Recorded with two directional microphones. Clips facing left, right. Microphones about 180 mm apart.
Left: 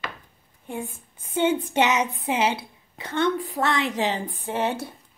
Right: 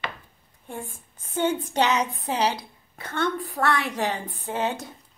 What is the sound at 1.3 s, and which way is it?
A woman's voice, 20° left (ahead or behind).